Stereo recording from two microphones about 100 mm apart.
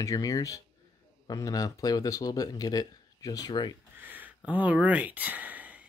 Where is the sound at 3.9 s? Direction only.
20° right (ahead or behind).